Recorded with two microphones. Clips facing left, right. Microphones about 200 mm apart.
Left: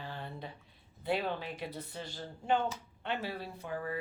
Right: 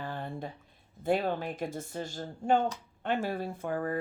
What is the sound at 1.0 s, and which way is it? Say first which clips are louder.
Speech: right 5 dB; 45° right (ahead or behind).